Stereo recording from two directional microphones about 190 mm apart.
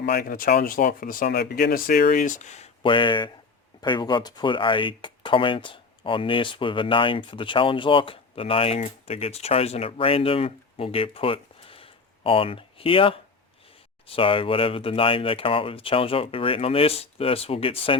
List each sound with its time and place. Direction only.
0.0 s speech: 55° left (ahead or behind); by 17.9 s 30° left (ahead or behind)